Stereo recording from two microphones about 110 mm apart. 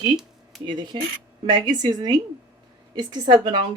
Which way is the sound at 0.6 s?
45° right (ahead or behind).